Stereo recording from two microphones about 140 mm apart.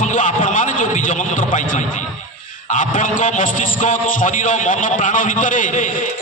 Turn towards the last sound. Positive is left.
turn(degrees=70)  # may be behind; listen again after turning